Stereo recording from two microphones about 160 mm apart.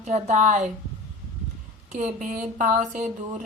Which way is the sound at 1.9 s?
50° right (ahead or behind).